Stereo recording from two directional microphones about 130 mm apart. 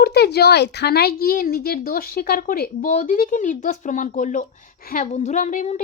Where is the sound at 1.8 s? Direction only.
90° left.